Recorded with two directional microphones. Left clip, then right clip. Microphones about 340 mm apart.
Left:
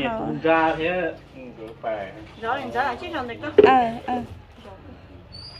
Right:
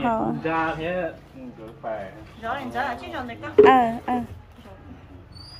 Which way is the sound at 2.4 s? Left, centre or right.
Centre.